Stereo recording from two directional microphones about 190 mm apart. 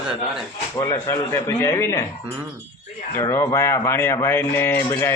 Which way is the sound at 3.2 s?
15° left (ahead or behind).